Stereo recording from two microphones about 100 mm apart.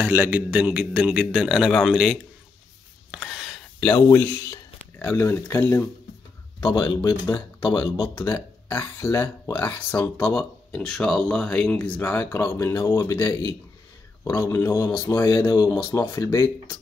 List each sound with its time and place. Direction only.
0.0 s a man's voice: 20° right (ahead or behind); by 2.1 s 5° right (ahead or behind)
3.1 s gasp: 5° right (ahead or behind)
3.8 s speech: 25° left (ahead or behind)
6.7 s speech: 35° left (ahead or behind)
8.1 s speech: 25° left (ahead or behind)
10.7 s speech: 5° left (ahead or behind); by 13.6 s 40° left (ahead or behind)
14.2 s speech: 30° left (ahead or behind)